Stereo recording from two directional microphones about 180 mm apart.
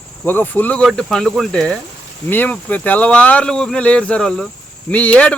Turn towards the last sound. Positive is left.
turn(degrees=5)  # may be behind; listen again after turning